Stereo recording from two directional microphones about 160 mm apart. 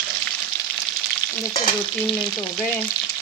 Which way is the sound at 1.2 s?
25° left (ahead or behind).